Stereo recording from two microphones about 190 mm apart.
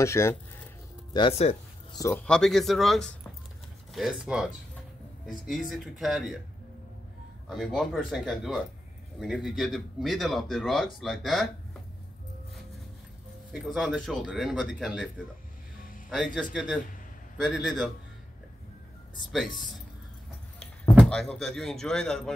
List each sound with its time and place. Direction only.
0.0 s speech: 15° left (ahead or behind)
1.1 s speech: 30° left (ahead or behind)
1.9 s speech: 15° left (ahead or behind)
2.2 s speech: 5° left (ahead or behind)
5.7 s speech: centre (ahead or behind)
7.4 s speech: centre (ahead or behind)
13.5 s speech: centre (ahead or behind)
17.4 s speech: centre (ahead or behind)
19.3 s speech: centre (ahead or behind)
20.9 s speech: centre (ahead or behind)